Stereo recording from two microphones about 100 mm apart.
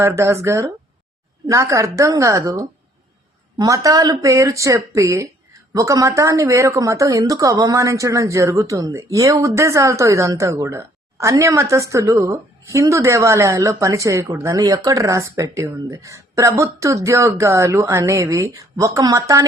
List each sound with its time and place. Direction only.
0.0 s speech: 30° right (ahead or behind)